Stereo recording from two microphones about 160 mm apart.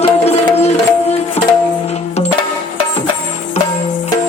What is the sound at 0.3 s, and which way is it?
Music, 40° left (ahead or behind).